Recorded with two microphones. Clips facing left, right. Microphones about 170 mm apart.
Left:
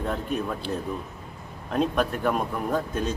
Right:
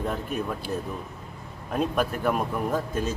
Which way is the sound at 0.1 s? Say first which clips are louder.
Left 1 dB; 5° right (ahead or behind).